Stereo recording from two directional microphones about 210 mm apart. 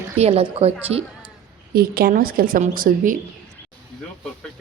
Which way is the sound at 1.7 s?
45° right (ahead or behind).